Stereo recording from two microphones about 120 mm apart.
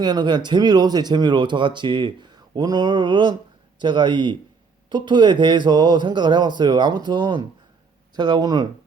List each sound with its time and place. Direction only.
0.0 s speech: 35° right (ahead or behind)